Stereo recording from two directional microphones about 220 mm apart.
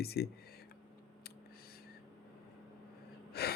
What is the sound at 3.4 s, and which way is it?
Gasp, 45° left (ahead or behind).